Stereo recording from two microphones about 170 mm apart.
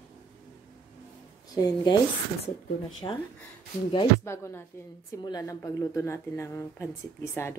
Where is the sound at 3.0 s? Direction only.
25° left (ahead or behind).